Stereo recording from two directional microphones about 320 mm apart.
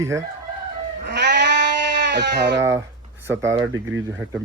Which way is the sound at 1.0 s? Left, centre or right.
Right.